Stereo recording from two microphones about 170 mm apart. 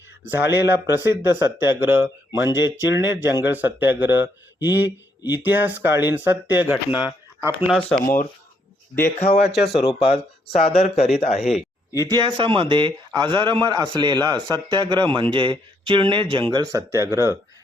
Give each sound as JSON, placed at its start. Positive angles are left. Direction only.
{"t": 0.3, "sound": "speech", "side_deg": -15}
{"t": 9.1, "sound": "speech", "side_deg": 40}
{"t": 11.9, "sound": "speech", "side_deg": -20}